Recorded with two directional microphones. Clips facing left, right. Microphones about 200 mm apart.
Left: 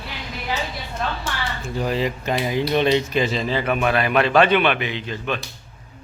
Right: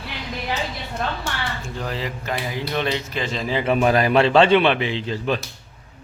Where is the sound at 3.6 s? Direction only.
30° right (ahead or behind).